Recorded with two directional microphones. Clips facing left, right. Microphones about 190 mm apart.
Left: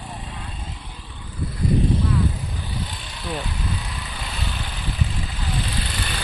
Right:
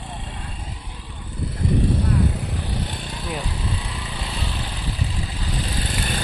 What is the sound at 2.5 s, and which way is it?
Vehicle, 70° right (ahead or behind).